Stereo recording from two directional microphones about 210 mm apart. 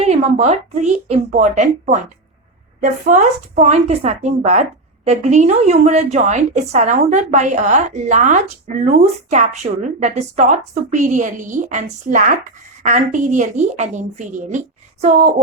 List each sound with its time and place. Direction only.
0.0 s a woman's voice: 30° right (ahead or behind)